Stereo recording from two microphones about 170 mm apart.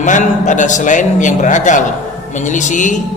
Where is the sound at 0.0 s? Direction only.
45° left (ahead or behind).